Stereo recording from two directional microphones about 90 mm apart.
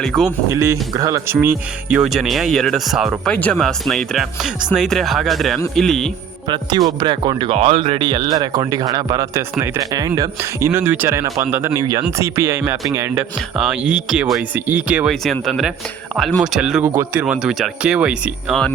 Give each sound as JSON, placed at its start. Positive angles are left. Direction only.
{"t": 0.0, "sound": "speech", "side_deg": 0}
{"t": 0.5, "sound": "speech", "side_deg": -35}
{"t": 1.3, "sound": "speech", "side_deg": -25}
{"t": 1.9, "sound": "speech", "side_deg": -5}
{"t": 6.5, "sound": "speech", "side_deg": -50}
{"t": 9.3, "sound": "speech", "side_deg": -35}
{"t": 10.7, "sound": "speech", "side_deg": -25}
{"t": 11.8, "sound": "speech", "side_deg": -45}
{"t": 12.1, "sound": "speech", "side_deg": -35}
{"t": 13.6, "sound": "speech", "side_deg": -10}
{"t": 15.1, "sound": "speech", "side_deg": 5}
{"t": 16.8, "sound": "speech", "side_deg": -25}
{"t": 17.2, "sound": "speech", "side_deg": -15}